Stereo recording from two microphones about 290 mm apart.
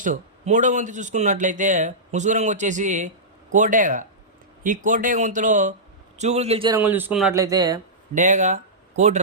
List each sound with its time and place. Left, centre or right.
0.0 s speech: right
6.7 s speech: centre
8.1 s speech: right